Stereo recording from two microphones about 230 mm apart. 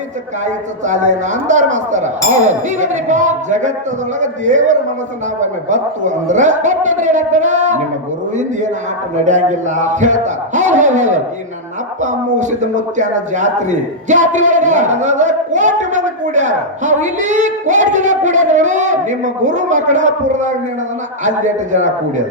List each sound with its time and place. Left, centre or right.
0.4 s speech: right
9.2 s speech: right